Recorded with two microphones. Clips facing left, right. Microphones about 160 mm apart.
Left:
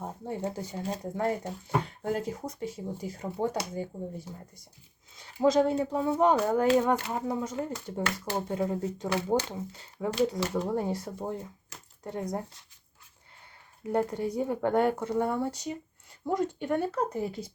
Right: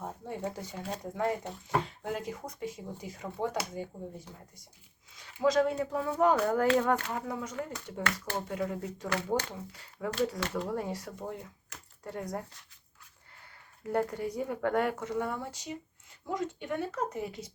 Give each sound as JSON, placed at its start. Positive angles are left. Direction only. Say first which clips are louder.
{"t": 0.0, "sound": "speech", "louder": "left 3 dB", "side_deg": 30}
{"t": 5.1, "sound": "speech", "louder": "left 3 dB", "side_deg": 30}
{"t": 13.8, "sound": "speech", "louder": "left 3 dB", "side_deg": 20}